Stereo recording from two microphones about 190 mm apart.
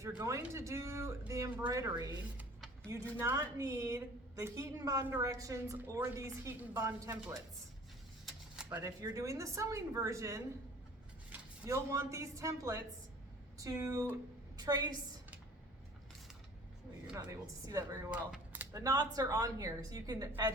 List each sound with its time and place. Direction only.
0.0 s a woman's voice: 15° right (ahead or behind)
8.5 s a woman's voice: 15° right (ahead or behind)
17.7 s a woman's voice: 20° right (ahead or behind)